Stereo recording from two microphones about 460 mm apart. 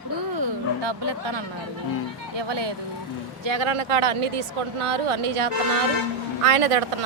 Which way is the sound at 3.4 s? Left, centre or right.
Right.